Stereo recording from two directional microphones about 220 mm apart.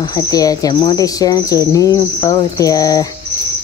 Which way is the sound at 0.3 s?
15° left (ahead or behind).